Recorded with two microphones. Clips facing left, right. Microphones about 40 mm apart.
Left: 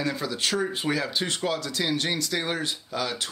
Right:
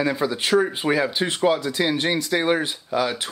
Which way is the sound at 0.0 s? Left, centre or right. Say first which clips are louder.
Right 5 dB; centre.